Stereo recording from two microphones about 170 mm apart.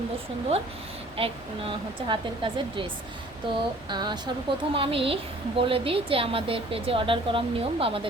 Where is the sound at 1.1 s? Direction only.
35° right (ahead or behind).